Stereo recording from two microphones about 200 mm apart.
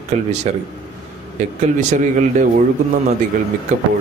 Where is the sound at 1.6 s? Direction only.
40° right (ahead or behind).